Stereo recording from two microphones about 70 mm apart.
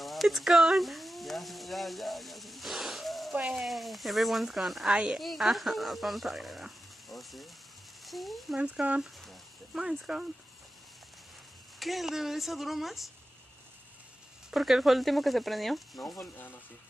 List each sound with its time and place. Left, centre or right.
0.0 s speech: centre
3.3 s speech: centre
3.6 s speech: centre
4.9 s speech: centre
5.2 s speech: centre
8.5 s speech: centre
9.8 s speech: centre
11.8 s speech: centre
14.5 s speech: centre